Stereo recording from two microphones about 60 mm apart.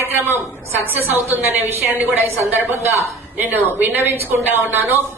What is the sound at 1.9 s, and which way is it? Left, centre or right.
A woman's voice, right.